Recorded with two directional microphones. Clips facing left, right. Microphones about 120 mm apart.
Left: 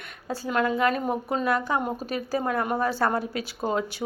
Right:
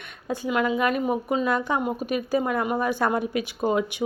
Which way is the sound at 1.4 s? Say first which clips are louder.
Right 1 dB; 20° right (ahead or behind).